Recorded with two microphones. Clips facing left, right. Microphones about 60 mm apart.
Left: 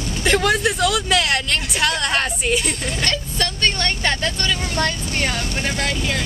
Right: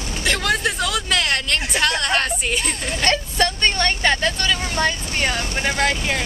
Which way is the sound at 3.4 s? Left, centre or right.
Centre.